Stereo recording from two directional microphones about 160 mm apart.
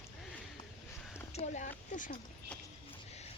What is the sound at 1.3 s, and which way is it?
Speech, 45° left (ahead or behind).